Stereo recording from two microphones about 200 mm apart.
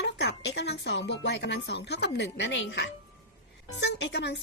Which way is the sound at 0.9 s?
60° left (ahead or behind).